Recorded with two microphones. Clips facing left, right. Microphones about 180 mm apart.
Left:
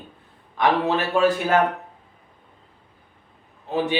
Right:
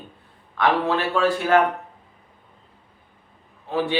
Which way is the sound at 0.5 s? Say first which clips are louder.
Even; 20° left (ahead or behind).